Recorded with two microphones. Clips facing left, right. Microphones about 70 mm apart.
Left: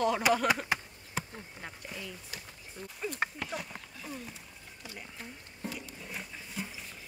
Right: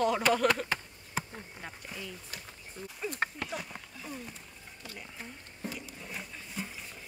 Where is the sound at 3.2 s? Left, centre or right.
Centre.